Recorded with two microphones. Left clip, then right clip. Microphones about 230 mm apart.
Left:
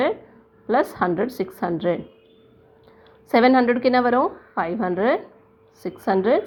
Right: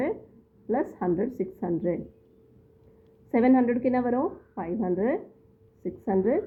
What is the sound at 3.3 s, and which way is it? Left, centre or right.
A woman's voice, centre.